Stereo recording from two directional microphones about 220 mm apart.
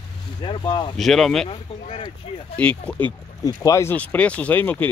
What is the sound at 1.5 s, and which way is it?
Speech, 25° left (ahead or behind).